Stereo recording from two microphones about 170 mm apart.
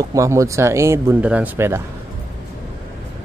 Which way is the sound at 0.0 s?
20° right (ahead or behind).